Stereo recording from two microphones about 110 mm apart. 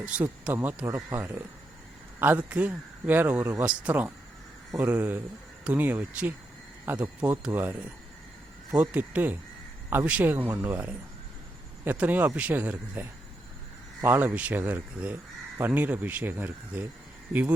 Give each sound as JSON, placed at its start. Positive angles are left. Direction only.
{"t": 0.0, "sound": "a man's voice", "side_deg": -10}